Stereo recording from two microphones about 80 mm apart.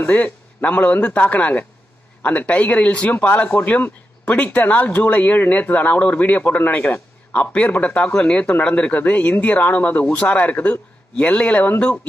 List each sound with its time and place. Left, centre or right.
0.0 s speech: left